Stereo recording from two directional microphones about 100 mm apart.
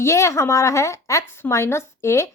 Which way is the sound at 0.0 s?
30° left (ahead or behind).